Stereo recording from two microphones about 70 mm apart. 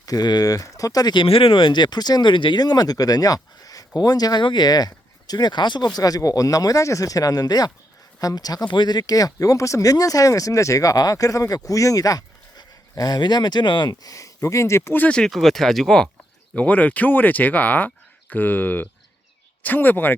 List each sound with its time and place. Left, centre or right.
0.0 s speech: left
1.7 s speech: left
14.9 s speech: left
15.2 s speech: centre
16.6 s speech: left